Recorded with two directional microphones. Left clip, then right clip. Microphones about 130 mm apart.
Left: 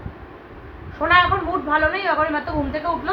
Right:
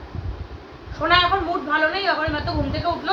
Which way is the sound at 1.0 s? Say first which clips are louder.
Left 1 dB; 45° left (ahead or behind).